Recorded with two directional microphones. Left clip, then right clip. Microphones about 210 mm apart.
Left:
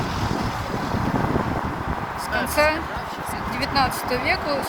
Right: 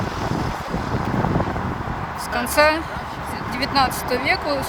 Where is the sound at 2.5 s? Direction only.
15° right (ahead or behind).